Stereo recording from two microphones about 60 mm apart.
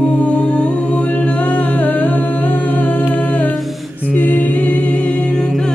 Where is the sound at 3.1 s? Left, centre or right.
Left.